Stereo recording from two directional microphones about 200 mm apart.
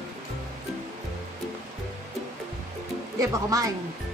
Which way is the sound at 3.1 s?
15° right (ahead or behind).